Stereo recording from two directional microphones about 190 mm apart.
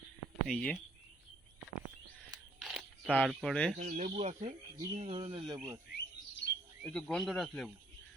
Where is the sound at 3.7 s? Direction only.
40° right (ahead or behind); by 5.8 s 20° right (ahead or behind).